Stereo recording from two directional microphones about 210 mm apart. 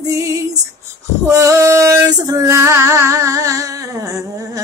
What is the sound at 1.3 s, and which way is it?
Female singing, 15° right (ahead or behind).